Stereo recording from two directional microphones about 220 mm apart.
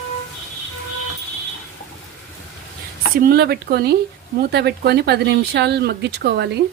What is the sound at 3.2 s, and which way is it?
Speech, 45° right (ahead or behind).